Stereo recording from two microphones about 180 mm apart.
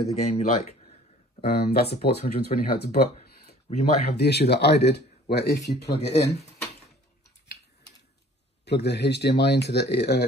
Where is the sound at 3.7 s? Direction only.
35° left (ahead or behind).